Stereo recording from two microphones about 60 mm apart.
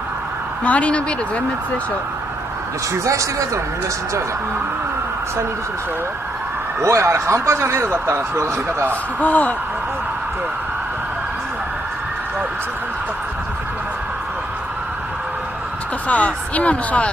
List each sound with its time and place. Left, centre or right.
0.7 s speech: left
2.9 s speech: right
6.8 s speech: right
9.2 s speech: left
16.1 s speech: left